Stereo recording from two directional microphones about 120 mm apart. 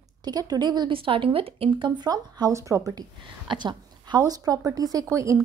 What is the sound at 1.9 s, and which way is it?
A woman's voice, 35° right (ahead or behind).